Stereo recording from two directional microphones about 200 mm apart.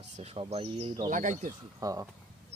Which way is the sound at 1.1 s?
40° right (ahead or behind).